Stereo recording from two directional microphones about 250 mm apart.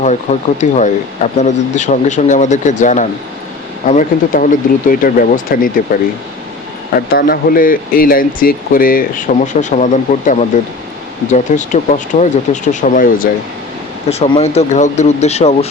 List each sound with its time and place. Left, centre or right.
0.0 s speech: left
7.1 s speech: left